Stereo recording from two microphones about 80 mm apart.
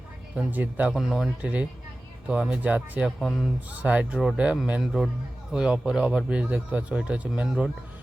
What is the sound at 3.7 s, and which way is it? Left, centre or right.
Speech, centre.